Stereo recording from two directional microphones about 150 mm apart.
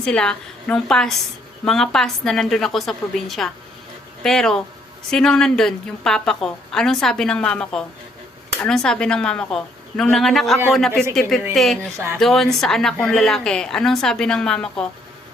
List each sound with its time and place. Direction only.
0.0 s a woman's voice: 5° left (ahead or behind)
11.9 s speech: 20° right (ahead or behind)
12.2 s a woman's voice: centre (ahead or behind)